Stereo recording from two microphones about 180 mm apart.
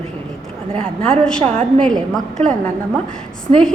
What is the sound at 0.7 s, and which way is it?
A woman's voice, 30° right (ahead or behind).